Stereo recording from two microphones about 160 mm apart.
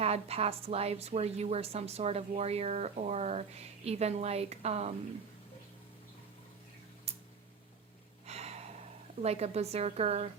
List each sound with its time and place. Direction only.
0.0 s a woman's voice: 40° right (ahead or behind)
8.3 s gasp: 40° right (ahead or behind)
9.2 s a woman's voice: 40° right (ahead or behind)